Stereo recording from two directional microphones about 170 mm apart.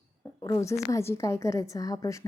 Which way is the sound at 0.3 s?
20° left (ahead or behind).